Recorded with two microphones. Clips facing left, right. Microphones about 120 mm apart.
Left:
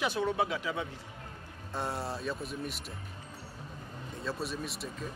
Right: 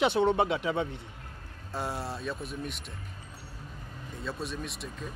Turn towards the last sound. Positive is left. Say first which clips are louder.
# even
turn(degrees=0)  # may be behind; listen again after turning